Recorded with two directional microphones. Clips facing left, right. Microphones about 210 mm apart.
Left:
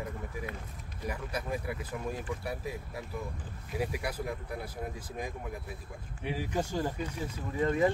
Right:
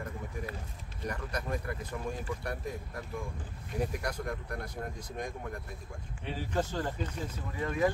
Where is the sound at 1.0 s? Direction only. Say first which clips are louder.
Even; 5° left (ahead or behind).